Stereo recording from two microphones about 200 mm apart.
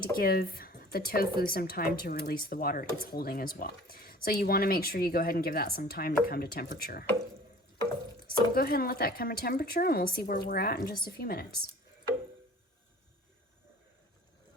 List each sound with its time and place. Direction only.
0.2 s speech: 50° left (ahead or behind)
8.3 s speech: 50° left (ahead or behind)